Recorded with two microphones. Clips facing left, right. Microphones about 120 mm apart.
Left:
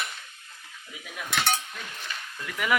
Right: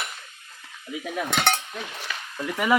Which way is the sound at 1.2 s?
60° right (ahead or behind).